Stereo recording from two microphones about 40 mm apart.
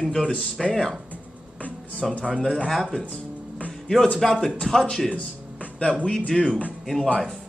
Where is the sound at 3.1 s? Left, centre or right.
Left.